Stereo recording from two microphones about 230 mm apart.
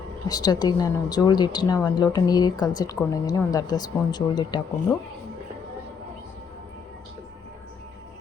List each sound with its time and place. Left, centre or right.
0.3 s speech: centre